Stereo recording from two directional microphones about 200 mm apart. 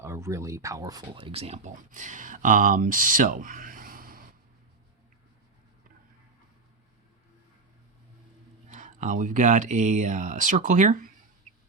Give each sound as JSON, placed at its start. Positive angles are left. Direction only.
{"t": 0.0, "sound": "speech", "side_deg": -15}
{"t": 8.7, "sound": "speech", "side_deg": -40}